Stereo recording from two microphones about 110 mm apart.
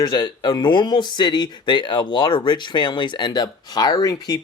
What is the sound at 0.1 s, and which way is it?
Speech, 45° left (ahead or behind).